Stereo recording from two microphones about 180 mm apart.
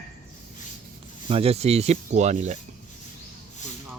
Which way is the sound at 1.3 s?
35° right (ahead or behind).